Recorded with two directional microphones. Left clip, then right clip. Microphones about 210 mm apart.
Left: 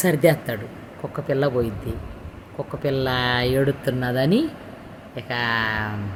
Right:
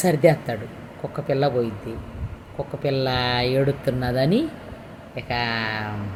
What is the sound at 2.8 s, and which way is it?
Speech, 15° left (ahead or behind).